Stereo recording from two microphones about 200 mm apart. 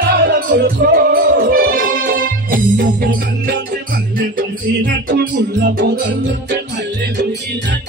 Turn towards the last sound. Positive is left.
turn(degrees=-60)  # may be behind; listen again after turning